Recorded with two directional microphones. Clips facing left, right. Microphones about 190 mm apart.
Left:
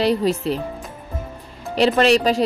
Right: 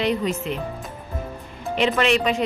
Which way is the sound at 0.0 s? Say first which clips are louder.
Left 4 dB; 35° left (ahead or behind).